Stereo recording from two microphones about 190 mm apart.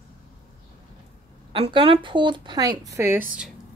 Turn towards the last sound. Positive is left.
turn(degrees=-15)  # may be behind; listen again after turning